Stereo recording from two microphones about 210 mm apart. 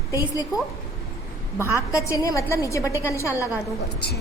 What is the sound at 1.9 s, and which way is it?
A woman's voice, 15° left (ahead or behind).